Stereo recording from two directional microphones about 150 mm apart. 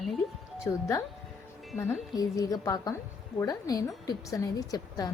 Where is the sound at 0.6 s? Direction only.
20° left (ahead or behind).